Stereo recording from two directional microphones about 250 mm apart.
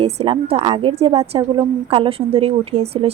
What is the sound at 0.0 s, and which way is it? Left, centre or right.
Speech, right.